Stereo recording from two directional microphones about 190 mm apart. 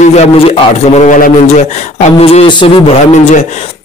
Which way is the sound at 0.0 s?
35° left (ahead or behind).